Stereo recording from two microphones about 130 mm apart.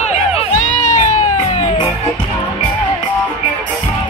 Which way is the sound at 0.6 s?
75° left (ahead or behind).